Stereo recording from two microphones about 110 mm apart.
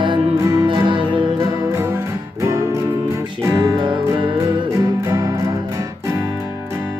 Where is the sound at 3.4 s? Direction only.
40° right (ahead or behind).